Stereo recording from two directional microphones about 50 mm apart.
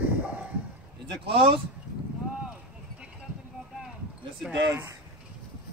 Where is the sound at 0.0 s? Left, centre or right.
Right.